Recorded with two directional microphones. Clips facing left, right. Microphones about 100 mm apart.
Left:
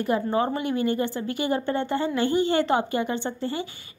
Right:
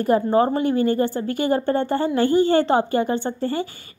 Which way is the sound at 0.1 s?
40° right (ahead or behind).